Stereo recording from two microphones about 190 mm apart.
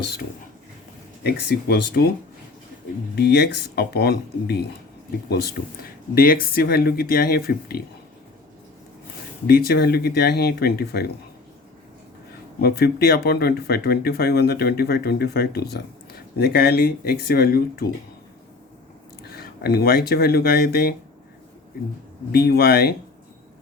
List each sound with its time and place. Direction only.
1.2 s speech: 60° left (ahead or behind)
3.2 s speech: 60° left (ahead or behind)
6.1 s speech: 50° left (ahead or behind)
9.5 s speech: 55° left (ahead or behind)
12.5 s speech: 55° left (ahead or behind)
19.3 s speech: 55° left (ahead or behind)
22.3 s speech: 55° left (ahead or behind)